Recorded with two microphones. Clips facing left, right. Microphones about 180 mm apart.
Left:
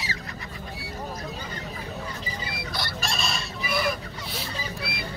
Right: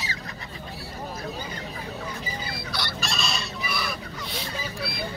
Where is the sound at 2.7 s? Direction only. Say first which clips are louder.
Even; 45° left (ahead or behind).